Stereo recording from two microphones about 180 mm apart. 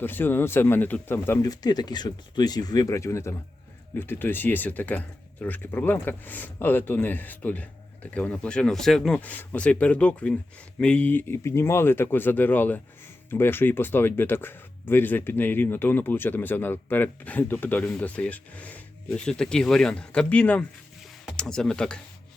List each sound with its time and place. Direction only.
0.0 s speech: 10° left (ahead or behind)